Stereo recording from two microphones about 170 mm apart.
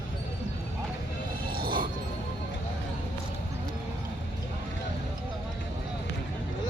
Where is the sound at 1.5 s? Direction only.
60° right (ahead or behind).